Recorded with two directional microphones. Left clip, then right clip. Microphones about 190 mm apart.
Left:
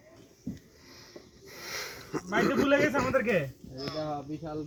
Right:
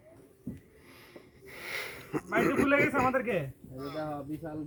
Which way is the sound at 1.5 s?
5° right (ahead or behind).